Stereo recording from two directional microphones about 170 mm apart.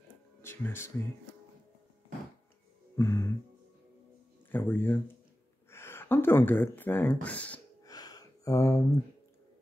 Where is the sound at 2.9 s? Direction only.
15° left (ahead or behind).